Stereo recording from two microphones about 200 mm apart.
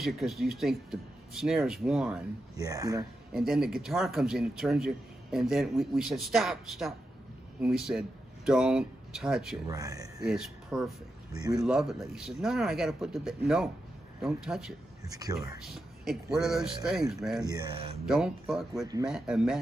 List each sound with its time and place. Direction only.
0.0 s speech: centre (ahead or behind)
2.5 s speech: 15° right (ahead or behind)
3.3 s speech: centre (ahead or behind)
9.7 s speech: 15° right (ahead or behind)
10.2 s speech: 5° right (ahead or behind)
15.0 s speech: 20° right (ahead or behind)
15.7 s speech: centre (ahead or behind)